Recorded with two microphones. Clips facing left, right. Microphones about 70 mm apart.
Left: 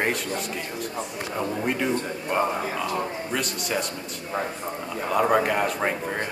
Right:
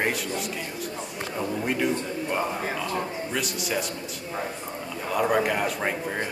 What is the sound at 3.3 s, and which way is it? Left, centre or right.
Speech, centre.